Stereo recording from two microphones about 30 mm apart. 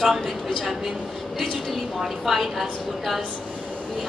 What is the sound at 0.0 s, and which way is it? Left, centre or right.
Speech, centre.